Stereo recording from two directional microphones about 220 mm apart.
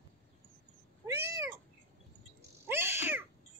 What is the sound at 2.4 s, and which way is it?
Bird, 10° right (ahead or behind).